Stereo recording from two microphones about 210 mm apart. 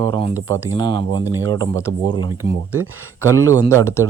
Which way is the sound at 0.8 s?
20° left (ahead or behind).